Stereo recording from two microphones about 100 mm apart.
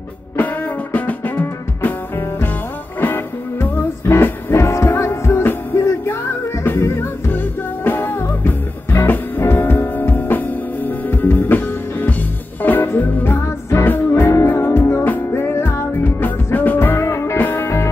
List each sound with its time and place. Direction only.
0.9 s music: 15° left (ahead or behind)